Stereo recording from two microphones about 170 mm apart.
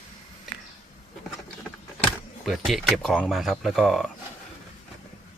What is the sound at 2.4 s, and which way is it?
Speech, centre (ahead or behind).